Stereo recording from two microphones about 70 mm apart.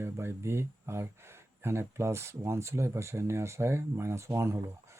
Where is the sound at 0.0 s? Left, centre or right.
Right.